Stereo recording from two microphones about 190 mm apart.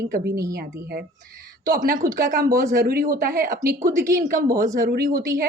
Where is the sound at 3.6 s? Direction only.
15° right (ahead or behind).